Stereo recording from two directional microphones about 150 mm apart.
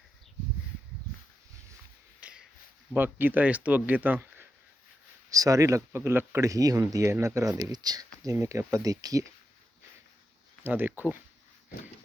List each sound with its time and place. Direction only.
2.2 s a sound: 10° right (ahead or behind)
2.9 s speech: 10° right (ahead or behind)
10.6 s speech: 15° right (ahead or behind)